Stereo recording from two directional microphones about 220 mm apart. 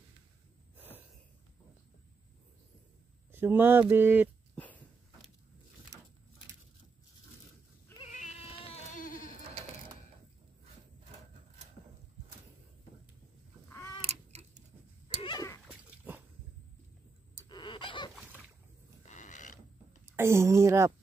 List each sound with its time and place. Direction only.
0.7 s snort: 10° right (ahead or behind)
3.3 s speech: 10° right (ahead or behind)
4.6 s walk: 5° left (ahead or behind)
5.9 s a sound: 15° right (ahead or behind)
8.1 s cat: 35° left (ahead or behind)
9.4 s sheep: 30° right (ahead or behind)
14.0 s tick-tock: 30° right (ahead or behind)
15.2 s goat: 15° left (ahead or behind)
15.6 s dog: 5° right (ahead or behind)
17.5 s a sound: 20° left (ahead or behind)
19.0 s mechanisms: 35° left (ahead or behind)
20.2 s a sound: 10° right (ahead or behind)